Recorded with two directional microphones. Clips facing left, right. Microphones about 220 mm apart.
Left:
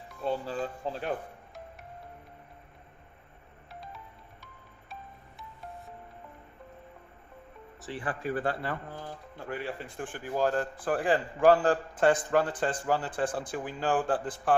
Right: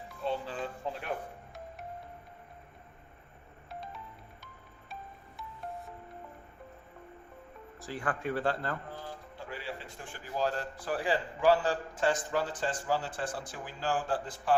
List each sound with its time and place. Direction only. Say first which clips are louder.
0.3 s speech: left 3 dB; 40° left (ahead or behind)
8.2 s speech: left 2 dB; 5° left (ahead or behind)
9.5 s a man's voice: left 6 dB; 55° left (ahead or behind)